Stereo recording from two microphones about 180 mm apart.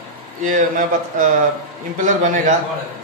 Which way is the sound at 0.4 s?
45° right (ahead or behind).